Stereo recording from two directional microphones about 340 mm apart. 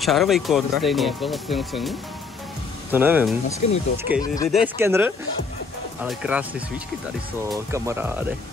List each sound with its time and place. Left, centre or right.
0.0 s speech: centre
3.4 s speech: centre
4.1 s speech: centre
7.7 s speech: centre